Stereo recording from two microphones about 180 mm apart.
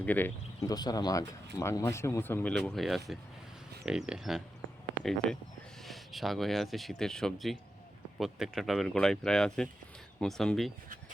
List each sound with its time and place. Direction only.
0.0 s speech: 10° left (ahead or behind)
0.7 s speech: 20° left (ahead or behind); by 10.7 s centre (ahead or behind)